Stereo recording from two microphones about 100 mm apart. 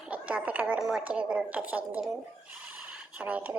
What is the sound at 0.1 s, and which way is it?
Speech, 15° right (ahead or behind).